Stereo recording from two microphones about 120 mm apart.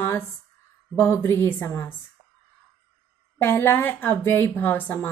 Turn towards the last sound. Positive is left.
turn(degrees=15)  # may be behind; listen again after turning